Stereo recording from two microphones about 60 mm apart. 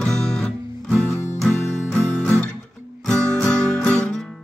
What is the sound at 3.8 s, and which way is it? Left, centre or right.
Guitar, left.